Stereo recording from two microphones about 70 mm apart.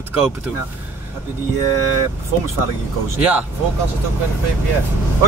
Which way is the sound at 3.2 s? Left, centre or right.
Right.